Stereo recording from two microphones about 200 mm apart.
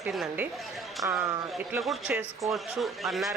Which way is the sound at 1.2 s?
10° right (ahead or behind).